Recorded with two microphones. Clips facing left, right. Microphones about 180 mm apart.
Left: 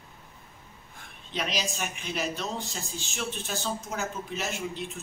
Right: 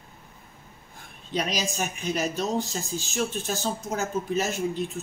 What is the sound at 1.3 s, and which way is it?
Speech, 45° right (ahead or behind).